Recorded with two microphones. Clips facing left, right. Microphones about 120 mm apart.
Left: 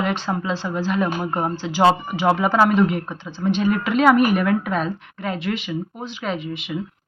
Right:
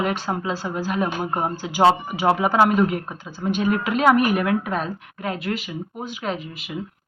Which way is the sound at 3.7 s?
45° right (ahead or behind).